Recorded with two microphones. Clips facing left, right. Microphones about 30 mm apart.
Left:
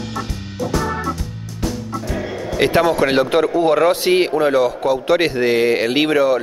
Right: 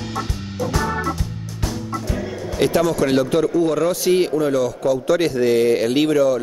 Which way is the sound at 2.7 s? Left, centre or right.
Left.